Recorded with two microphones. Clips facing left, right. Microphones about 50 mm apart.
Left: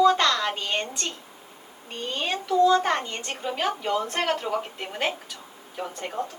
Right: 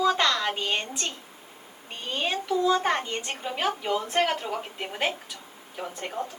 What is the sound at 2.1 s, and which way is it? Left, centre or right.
A woman's voice, centre.